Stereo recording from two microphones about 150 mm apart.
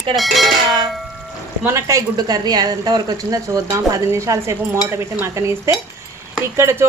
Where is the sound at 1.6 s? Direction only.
20° right (ahead or behind).